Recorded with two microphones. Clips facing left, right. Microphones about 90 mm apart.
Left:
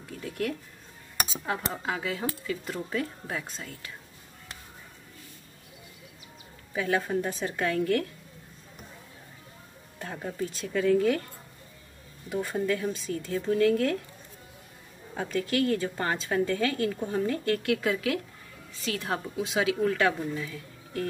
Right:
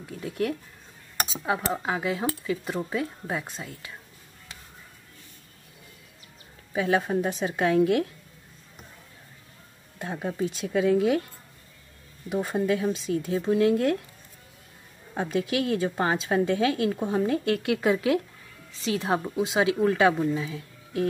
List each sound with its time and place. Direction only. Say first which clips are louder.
0.1 s speech: right 3 dB; 10° right (ahead or behind)
6.7 s a woman's voice: right 3 dB; 20° right (ahead or behind)
9.9 s speech: right 4 dB; 15° right (ahead or behind)
10.2 s a woman's voice: right 4 dB; 25° right (ahead or behind)
12.3 s a woman's voice: right 3 dB; 20° right (ahead or behind)
15.5 s a woman's voice: left 1 dB; 15° right (ahead or behind)